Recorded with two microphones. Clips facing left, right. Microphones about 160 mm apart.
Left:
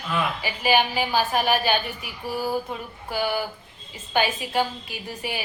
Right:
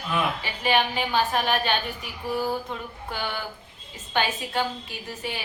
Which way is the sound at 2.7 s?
10° left (ahead or behind).